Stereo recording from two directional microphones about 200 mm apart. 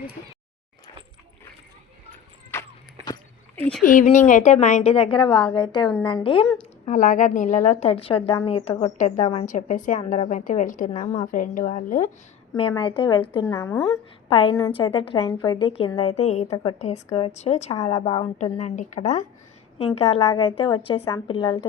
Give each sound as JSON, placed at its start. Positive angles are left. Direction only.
{"t": 2.5, "sound": "a sound", "side_deg": 15}
{"t": 3.5, "sound": "speech", "side_deg": 5}
{"t": 3.8, "sound": "a woman's voice", "side_deg": 40}
{"t": 6.8, "sound": "a woman's voice", "side_deg": 40}
{"t": 11.0, "sound": "a woman's voice", "side_deg": 25}
{"t": 11.3, "sound": "a woman's voice", "side_deg": 40}
{"t": 12.5, "sound": "a woman's voice", "side_deg": 25}
{"t": 17.7, "sound": "a woman's voice", "side_deg": 20}
{"t": 18.0, "sound": "a woman's voice", "side_deg": 30}